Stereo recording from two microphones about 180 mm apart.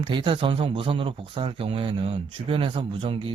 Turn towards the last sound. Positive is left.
turn(degrees=-30)  # may be behind; listen again after turning